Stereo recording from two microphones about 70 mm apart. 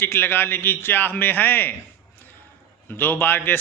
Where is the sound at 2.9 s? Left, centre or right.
Left.